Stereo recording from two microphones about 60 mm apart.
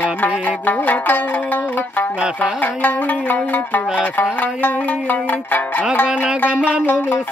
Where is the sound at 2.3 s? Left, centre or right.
Left.